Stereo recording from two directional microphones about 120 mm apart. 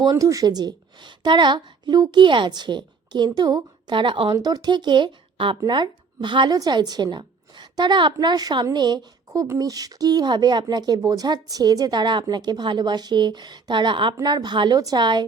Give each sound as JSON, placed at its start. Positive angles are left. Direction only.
{"t": 0.0, "sound": "a woman's voice", "side_deg": -30}